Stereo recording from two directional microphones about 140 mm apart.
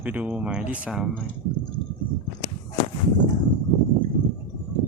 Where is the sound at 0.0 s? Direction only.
10° right (ahead or behind).